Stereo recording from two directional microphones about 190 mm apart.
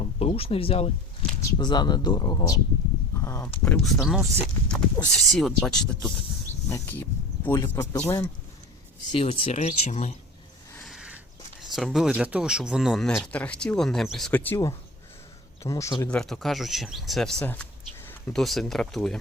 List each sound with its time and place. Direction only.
0.0 s a sound: 30° left (ahead or behind)
1.4 s speech: 20° left (ahead or behind)
3.6 s speech: 5° left (ahead or behind)
9.1 s speech: 30° left (ahead or behind)
10.8 s a sound: 5° right (ahead or behind)
11.6 s speech: centre (ahead or behind); by 16.0 s 15° left (ahead or behind)
16.0 s speech: 5° left (ahead or behind)